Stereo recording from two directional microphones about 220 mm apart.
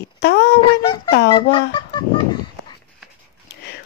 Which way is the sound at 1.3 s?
20° left (ahead or behind).